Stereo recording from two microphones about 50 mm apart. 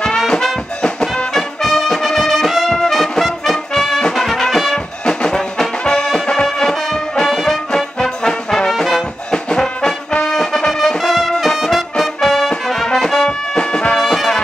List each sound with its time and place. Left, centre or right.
1.0 s music: centre
5.0 s music: centre
7.7 s music: centre
9.3 s brass instrument: centre
10.3 s music: centre
13.6 s music: centre
13.9 s music: centre